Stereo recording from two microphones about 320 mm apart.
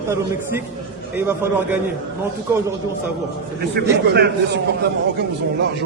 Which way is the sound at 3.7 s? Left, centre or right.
Right.